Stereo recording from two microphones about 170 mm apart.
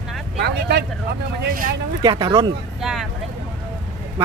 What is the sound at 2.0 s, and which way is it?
Speech, 25° right (ahead or behind).